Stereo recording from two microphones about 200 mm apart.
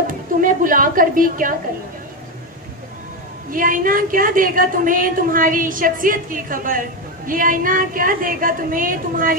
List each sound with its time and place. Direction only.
0.0 s a woman's voice: 45° right (ahead or behind)
3.4 s a woman's voice: 45° right (ahead or behind)